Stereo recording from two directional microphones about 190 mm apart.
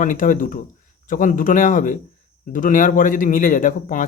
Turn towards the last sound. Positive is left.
turn(degrees=45)  # may be behind; listen again after turning